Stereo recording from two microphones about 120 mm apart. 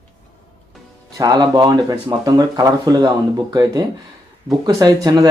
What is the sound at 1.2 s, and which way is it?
Speech, 35° right (ahead or behind).